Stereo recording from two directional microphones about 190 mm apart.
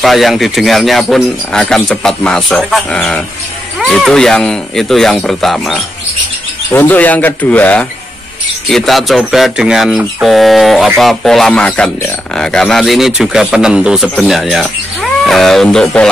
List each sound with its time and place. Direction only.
0.0 s speech: centre (ahead or behind)